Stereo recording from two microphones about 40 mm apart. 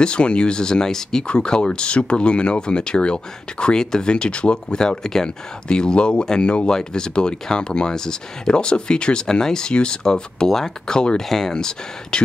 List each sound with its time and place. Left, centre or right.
0.0 s speech: left
1.2 s speech: left